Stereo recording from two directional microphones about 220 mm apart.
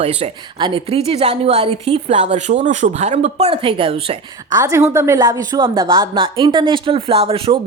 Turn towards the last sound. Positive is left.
turn(degrees=-25)  # may be behind; listen again after turning